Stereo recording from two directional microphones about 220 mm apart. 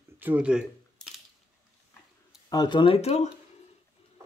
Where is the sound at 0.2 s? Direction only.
5° right (ahead or behind).